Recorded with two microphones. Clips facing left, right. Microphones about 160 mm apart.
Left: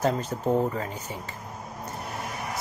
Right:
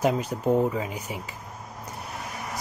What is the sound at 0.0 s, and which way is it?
Speech, 10° right (ahead or behind).